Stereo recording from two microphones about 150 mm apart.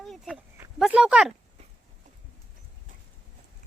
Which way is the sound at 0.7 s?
5° right (ahead or behind).